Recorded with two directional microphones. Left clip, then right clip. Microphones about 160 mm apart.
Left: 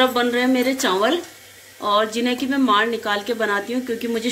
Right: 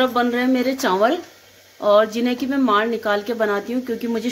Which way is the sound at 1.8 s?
90° right.